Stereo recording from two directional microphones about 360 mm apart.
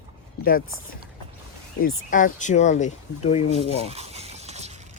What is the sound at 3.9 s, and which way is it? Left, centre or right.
Mechanisms, centre.